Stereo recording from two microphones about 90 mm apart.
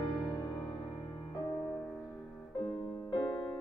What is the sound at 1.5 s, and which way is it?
Music, 20° left (ahead or behind).